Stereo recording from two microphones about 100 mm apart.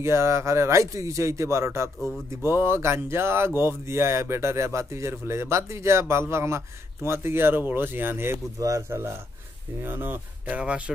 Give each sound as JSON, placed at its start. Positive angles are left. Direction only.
{"t": 0.0, "sound": "speech", "side_deg": -25}